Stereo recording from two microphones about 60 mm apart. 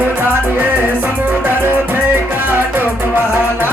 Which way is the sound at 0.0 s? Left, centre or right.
Right.